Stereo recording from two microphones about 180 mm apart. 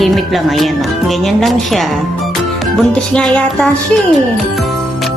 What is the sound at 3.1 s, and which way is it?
Speech, 5° left (ahead or behind).